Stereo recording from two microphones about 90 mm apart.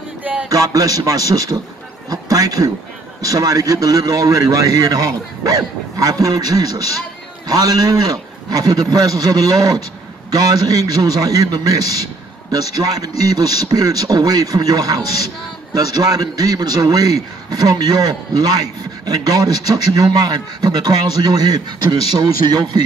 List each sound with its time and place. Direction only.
0.2 s music: 15° right (ahead or behind)
0.5 s a man's voice: 40° right (ahead or behind)